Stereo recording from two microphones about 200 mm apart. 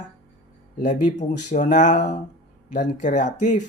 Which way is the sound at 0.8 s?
40° left (ahead or behind).